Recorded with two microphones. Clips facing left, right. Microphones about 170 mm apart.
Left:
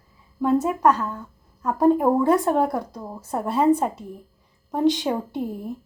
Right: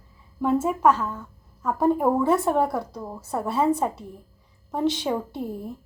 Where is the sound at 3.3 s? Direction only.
15° left (ahead or behind).